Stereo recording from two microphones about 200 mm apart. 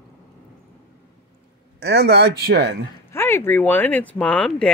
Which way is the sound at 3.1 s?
10° left (ahead or behind).